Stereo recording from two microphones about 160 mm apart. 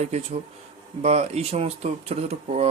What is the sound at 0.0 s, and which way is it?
Speech, 45° right (ahead or behind).